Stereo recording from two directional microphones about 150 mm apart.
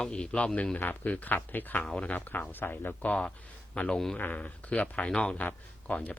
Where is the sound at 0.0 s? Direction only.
5° left (ahead or behind).